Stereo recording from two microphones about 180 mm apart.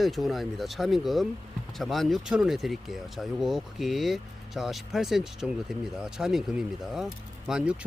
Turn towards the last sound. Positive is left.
turn(degrees=-5)  # may be behind; listen again after turning